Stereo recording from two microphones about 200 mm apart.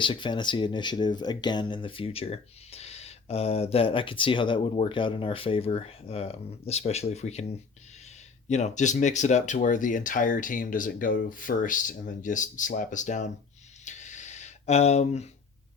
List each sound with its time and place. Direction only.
0.0 s speech: 25° left (ahead or behind)
8.4 s speech: 35° left (ahead or behind)
13.8 s a sound: 35° left (ahead or behind)